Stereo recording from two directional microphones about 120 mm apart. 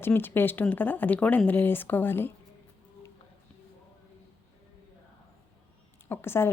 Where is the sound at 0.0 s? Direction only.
15° left (ahead or behind).